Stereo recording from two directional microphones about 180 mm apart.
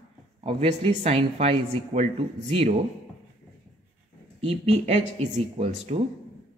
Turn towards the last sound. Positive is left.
turn(degrees=-35)  # may be behind; listen again after turning